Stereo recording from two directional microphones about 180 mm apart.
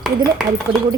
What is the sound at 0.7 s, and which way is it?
Speech, 30° right (ahead or behind).